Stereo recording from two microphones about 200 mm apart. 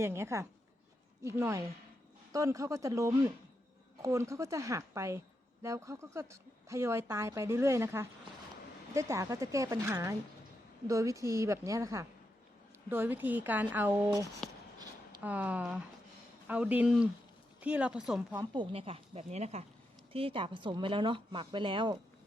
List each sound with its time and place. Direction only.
0.0 s a woman's voice: 15° right (ahead or behind)
18.5 s speech: 25° right (ahead or behind)